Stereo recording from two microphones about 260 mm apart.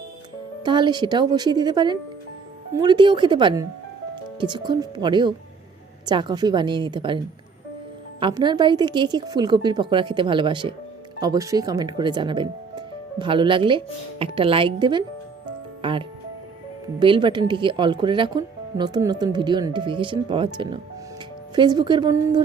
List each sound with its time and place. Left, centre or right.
0.6 s speech: centre
8.2 s speech: centre
15.4 s music: centre
17.0 s speech: centre